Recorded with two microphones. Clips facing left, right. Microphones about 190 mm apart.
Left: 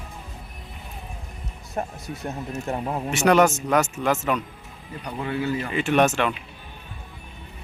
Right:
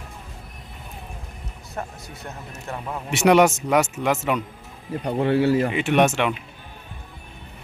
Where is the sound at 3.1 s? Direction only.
15° right (ahead or behind).